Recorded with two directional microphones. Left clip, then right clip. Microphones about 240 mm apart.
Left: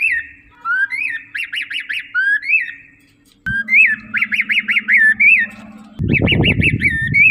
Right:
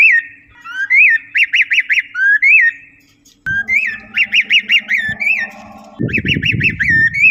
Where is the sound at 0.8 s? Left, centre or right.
Left.